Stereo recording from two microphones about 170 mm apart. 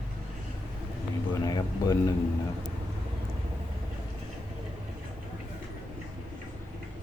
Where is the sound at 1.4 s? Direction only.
20° left (ahead or behind).